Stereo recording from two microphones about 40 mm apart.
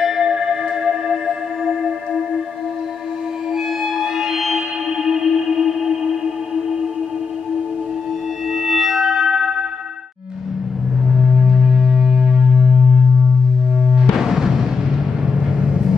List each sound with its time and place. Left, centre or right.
0.0 s music: centre
3.5 s music: centre
8.5 s music: centre
11.1 s music: centre
14.1 s music: centre
15.2 s vehicle: centre